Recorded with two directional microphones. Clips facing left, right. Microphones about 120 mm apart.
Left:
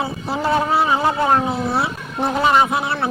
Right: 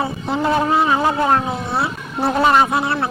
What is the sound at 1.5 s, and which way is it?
Speech, centre (ahead or behind).